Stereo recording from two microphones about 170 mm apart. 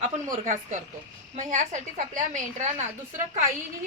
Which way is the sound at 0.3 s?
45° right (ahead or behind).